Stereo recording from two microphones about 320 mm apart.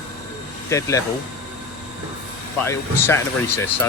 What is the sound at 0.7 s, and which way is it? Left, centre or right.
Speech, centre.